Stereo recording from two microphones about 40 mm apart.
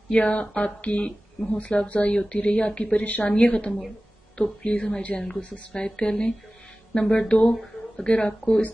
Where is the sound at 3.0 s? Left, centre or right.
Left.